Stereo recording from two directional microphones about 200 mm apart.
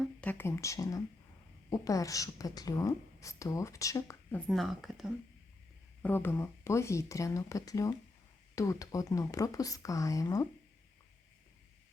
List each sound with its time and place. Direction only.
0.2 s a woman's voice: 10° left (ahead or behind)
4.4 s speech: centre (ahead or behind)
6.0 s a woman's voice: 10° left (ahead or behind)